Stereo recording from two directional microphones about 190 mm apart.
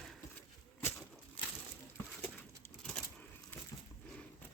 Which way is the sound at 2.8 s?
5° left (ahead or behind).